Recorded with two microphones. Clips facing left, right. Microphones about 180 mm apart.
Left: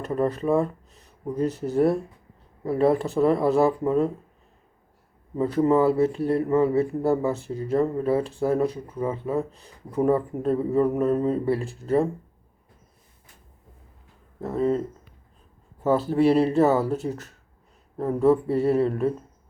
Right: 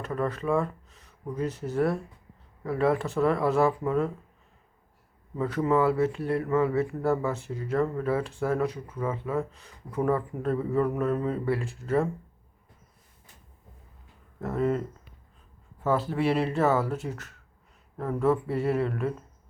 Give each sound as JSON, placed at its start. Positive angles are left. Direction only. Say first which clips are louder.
{"t": 0.0, "sound": "speech", "louder": "left 5 dB", "side_deg": 35}
{"t": 5.4, "sound": "speech", "louder": "left 4 dB", "side_deg": 30}
{"t": 14.4, "sound": "speech", "louder": "left 3 dB", "side_deg": 30}
{"t": 15.8, "sound": "speech", "louder": "left 6 dB", "side_deg": 35}